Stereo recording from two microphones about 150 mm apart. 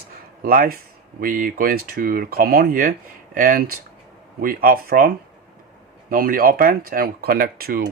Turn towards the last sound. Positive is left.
turn(degrees=-85)